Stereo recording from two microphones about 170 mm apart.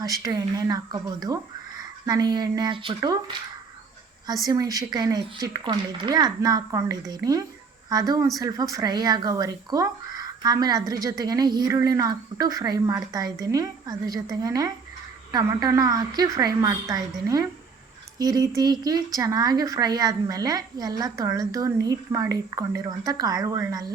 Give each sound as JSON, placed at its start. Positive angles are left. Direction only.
{"t": 0.0, "sound": "speech", "side_deg": -20}
{"t": 4.4, "sound": "speech", "side_deg": -20}